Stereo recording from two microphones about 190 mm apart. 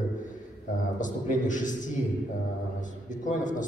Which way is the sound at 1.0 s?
40° left (ahead or behind).